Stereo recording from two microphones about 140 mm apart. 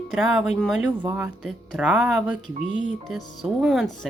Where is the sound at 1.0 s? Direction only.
15° right (ahead or behind).